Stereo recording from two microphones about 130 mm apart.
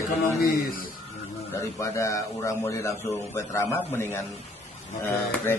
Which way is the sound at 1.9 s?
20° left (ahead or behind).